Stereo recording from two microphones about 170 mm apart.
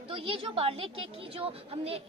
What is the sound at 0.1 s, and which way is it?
A woman's voice, 30° right (ahead or behind).